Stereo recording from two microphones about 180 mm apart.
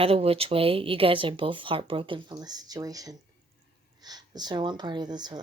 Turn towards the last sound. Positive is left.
turn(degrees=-25)  # may be behind; listen again after turning